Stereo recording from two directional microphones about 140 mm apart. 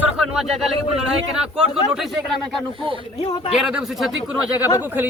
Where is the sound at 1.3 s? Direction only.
5° right (ahead or behind).